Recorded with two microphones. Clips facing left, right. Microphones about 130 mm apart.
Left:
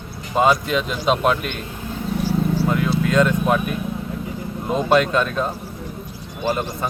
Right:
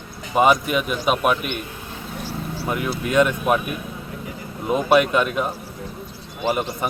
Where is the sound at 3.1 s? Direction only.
15° right (ahead or behind).